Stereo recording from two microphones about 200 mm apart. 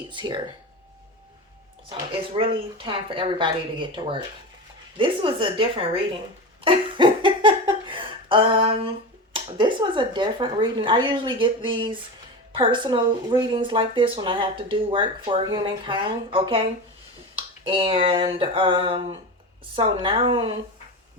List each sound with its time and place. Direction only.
0.1 s speech: 25° right (ahead or behind)
2.4 s speech: 25° right (ahead or behind)
6.7 s a sound: 25° right (ahead or behind)
9.3 s speech: 25° right (ahead or behind)